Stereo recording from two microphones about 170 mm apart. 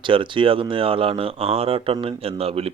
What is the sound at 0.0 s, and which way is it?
Speech, 30° right (ahead or behind).